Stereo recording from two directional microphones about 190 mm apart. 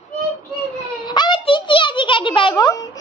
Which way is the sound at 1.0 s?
25° left (ahead or behind).